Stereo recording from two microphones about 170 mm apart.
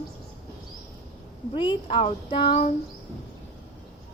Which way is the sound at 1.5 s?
30° left (ahead or behind).